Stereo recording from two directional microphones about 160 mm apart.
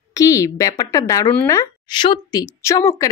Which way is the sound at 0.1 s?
20° left (ahead or behind).